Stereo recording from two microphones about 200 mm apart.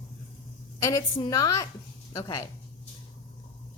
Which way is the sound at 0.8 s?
20° left (ahead or behind).